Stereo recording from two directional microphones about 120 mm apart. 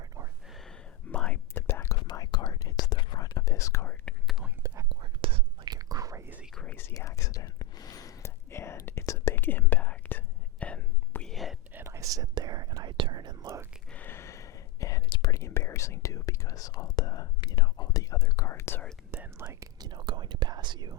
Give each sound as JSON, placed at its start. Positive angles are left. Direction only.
{"t": 1.1, "sound": "whispering", "side_deg": 10}
{"t": 2.0, "sound": "whispering", "side_deg": 35}
{"t": 4.0, "sound": "whispering", "side_deg": 0}
{"t": 4.6, "sound": "whispering", "side_deg": -25}
{"t": 4.9, "sound": "whispering", "side_deg": -45}
{"t": 5.7, "sound": "whispering", "side_deg": -30}
{"t": 6.2, "sound": "whispering", "side_deg": -15}
{"t": 6.5, "sound": "whispering", "side_deg": 5}
{"t": 6.9, "sound": "whispering", "side_deg": 25}
{"t": 11.7, "sound": "whispering", "side_deg": -20}
{"t": 13.9, "sound": "a sound", "side_deg": 15}
{"t": 15.3, "sound": "whispering", "side_deg": 25}
{"t": 19.1, "sound": "whispering", "side_deg": -20}
{"t": 19.5, "sound": "whispering", "side_deg": -35}